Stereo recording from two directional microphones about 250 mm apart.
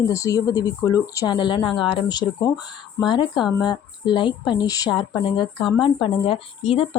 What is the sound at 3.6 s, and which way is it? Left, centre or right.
Speech, centre.